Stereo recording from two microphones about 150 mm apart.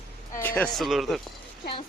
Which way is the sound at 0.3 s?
15° left (ahead or behind).